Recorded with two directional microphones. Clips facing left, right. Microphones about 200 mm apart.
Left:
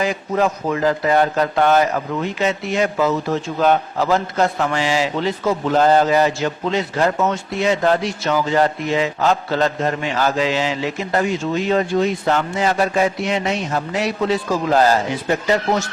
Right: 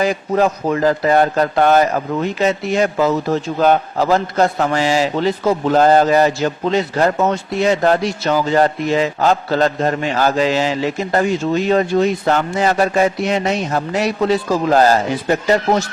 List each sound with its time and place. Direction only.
0.0 s a man's voice: 40° right (ahead or behind)